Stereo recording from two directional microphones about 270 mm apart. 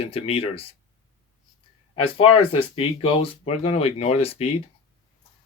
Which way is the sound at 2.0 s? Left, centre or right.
Left.